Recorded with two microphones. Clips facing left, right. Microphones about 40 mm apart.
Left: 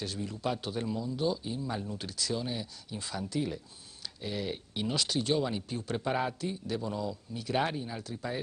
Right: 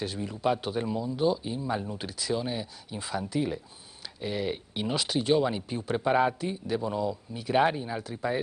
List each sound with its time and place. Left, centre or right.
0.0 s speech: centre